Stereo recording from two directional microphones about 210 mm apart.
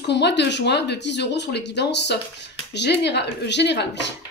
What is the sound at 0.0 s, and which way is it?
Speech, 55° left (ahead or behind).